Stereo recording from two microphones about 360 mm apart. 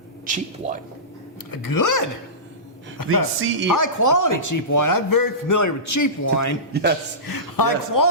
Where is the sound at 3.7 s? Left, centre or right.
Left.